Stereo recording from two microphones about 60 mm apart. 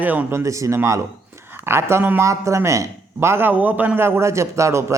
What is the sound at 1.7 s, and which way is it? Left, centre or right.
Speech, right.